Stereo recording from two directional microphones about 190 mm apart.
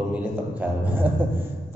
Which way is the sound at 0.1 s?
10° right (ahead or behind).